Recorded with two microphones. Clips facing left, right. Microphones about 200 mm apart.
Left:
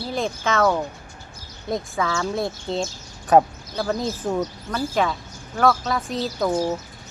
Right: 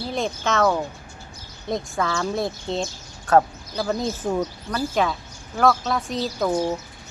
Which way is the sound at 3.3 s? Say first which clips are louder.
Left 2 dB; 15° left (ahead or behind).